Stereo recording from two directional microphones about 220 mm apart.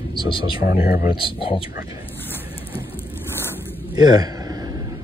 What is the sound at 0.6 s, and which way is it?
Speech, 40° left (ahead or behind).